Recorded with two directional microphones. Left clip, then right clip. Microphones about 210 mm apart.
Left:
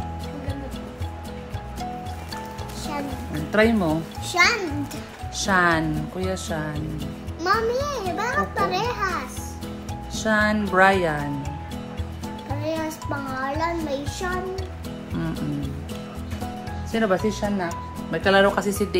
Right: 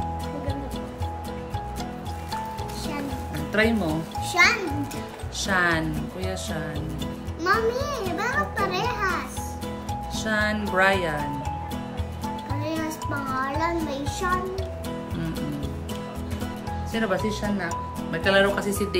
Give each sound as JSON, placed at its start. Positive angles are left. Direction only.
{"t": 3.5, "sound": "speech", "side_deg": 20}
{"t": 4.3, "sound": "a child's voice", "side_deg": 0}
{"t": 5.4, "sound": "speech", "side_deg": 20}
{"t": 7.4, "sound": "a child's voice", "side_deg": 0}
{"t": 10.1, "sound": "speech", "side_deg": 20}
{"t": 12.6, "sound": "music", "side_deg": 0}
{"t": 16.9, "sound": "speech", "side_deg": 15}